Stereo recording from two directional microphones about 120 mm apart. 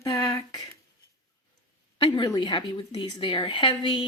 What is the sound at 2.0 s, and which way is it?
A woman's voice, 40° left (ahead or behind).